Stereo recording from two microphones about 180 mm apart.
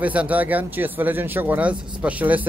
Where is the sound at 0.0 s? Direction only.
10° right (ahead or behind).